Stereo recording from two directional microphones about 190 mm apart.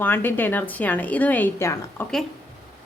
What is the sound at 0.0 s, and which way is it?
A woman's voice, 10° left (ahead or behind).